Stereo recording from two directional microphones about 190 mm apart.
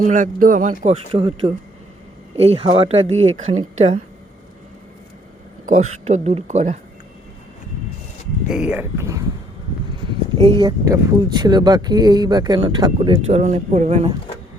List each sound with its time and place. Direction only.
0.0 s speech: 40° right (ahead or behind)
1.1 s speech: 25° right (ahead or behind)
3.1 s speech: 90° right
3.5 s speech: 35° right (ahead or behind)
5.6 s speech: 40° right (ahead or behind)
8.4 s speech: 5° right (ahead or behind)
10.6 s speech: 20° right (ahead or behind)